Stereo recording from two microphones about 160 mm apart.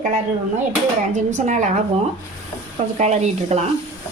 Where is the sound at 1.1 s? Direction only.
50° right (ahead or behind).